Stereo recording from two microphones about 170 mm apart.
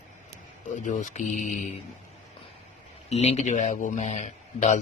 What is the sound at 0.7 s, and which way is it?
Speech, 45° left (ahead or behind).